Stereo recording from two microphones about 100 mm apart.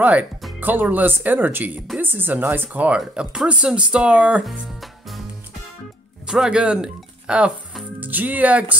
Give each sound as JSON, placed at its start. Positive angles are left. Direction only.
{"t": 0.0, "sound": "speech", "side_deg": -15}
{"t": 6.2, "sound": "speech", "side_deg": -5}